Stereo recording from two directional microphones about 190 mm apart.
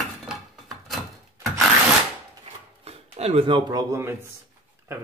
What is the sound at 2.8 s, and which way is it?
Speech, 30° right (ahead or behind).